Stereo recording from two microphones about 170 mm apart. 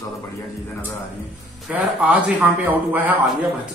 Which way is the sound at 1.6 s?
5° right (ahead or behind).